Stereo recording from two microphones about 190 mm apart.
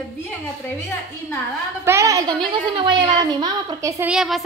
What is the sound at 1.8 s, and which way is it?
A woman's voice, 15° right (ahead or behind).